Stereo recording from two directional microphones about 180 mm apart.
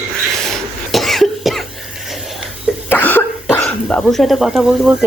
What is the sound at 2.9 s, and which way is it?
Cough, 10° left (ahead or behind).